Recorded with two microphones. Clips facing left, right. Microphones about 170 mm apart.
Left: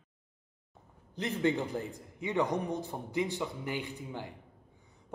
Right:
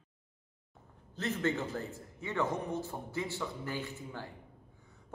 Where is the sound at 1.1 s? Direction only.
15° left (ahead or behind).